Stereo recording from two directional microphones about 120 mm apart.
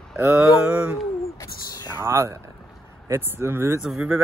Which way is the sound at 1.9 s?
20° right (ahead or behind).